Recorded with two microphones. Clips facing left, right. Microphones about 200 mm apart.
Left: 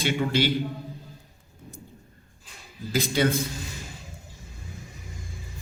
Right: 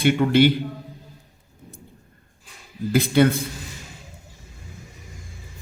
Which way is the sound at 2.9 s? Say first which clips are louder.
Right 7 dB; 55° right (ahead or behind).